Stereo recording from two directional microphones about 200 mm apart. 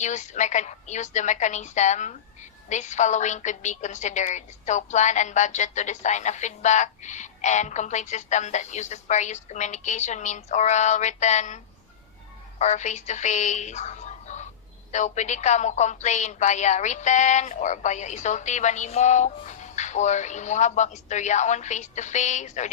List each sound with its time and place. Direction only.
0.0 s a woman's voice: 35° left (ahead or behind)